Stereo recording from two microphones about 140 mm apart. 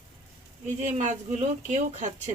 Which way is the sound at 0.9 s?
55° right (ahead or behind).